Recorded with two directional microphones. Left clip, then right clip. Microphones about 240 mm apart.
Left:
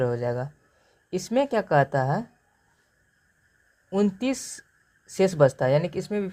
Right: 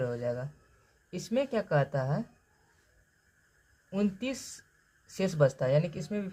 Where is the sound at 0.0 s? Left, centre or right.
Left.